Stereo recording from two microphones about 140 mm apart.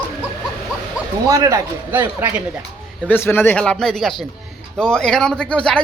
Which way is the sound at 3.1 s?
15° left (ahead or behind).